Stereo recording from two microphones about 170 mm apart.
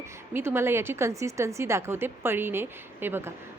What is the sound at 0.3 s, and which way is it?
A woman's voice, 15° right (ahead or behind).